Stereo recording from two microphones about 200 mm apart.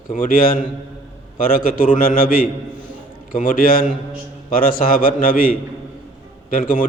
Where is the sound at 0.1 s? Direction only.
45° left (ahead or behind).